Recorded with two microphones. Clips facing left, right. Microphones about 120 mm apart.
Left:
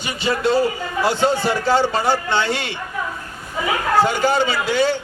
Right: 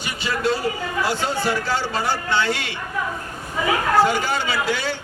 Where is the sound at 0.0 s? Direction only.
25° left (ahead or behind).